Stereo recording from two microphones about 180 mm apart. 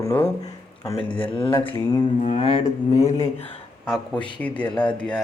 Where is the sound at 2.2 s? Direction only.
30° left (ahead or behind).